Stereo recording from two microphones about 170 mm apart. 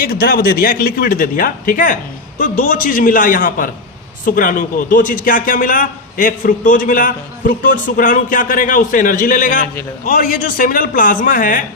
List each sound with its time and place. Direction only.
0.0 s a man's voice: 55° left (ahead or behind)